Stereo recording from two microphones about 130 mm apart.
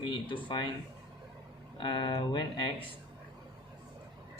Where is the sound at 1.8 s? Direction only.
40° left (ahead or behind).